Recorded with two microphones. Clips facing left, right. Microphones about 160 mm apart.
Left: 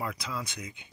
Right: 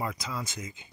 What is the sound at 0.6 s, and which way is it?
Speech, 70° left (ahead or behind).